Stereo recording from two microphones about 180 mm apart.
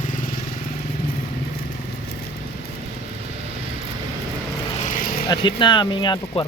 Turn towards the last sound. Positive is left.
turn(degrees=25)  # may be behind; listen again after turning